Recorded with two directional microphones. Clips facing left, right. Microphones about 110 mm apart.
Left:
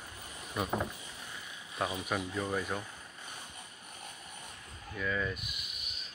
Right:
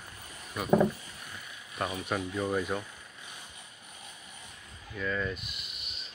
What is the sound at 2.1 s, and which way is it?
Speech, 5° right (ahead or behind).